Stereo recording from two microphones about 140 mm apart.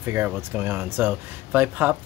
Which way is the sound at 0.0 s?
15° right (ahead or behind).